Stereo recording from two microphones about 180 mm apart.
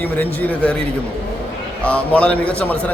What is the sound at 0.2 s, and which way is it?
Speech, 5° left (ahead or behind).